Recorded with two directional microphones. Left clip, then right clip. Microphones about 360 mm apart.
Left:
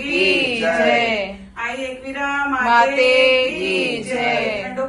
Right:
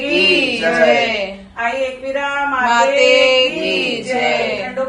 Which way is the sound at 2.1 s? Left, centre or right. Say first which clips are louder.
Right 1 dB; centre.